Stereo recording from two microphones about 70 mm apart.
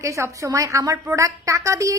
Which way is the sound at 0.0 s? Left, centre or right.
Right.